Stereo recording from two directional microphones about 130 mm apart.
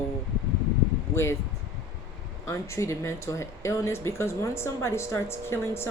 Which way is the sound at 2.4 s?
25° left (ahead or behind).